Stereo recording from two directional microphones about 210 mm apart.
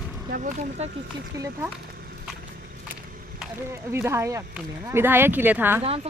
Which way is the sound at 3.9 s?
10° right (ahead or behind).